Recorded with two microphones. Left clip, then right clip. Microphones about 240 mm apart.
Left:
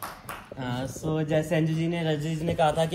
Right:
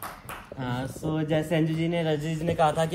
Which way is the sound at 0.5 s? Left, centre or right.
Right.